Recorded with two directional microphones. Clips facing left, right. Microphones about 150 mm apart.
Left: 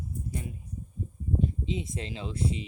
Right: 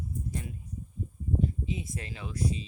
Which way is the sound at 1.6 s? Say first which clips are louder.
Left 3 dB; 25° left (ahead or behind).